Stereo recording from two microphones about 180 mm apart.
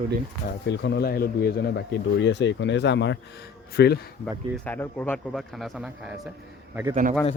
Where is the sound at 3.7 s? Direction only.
65° left (ahead or behind).